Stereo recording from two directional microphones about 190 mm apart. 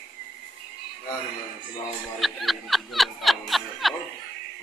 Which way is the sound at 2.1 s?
Centre (ahead or behind).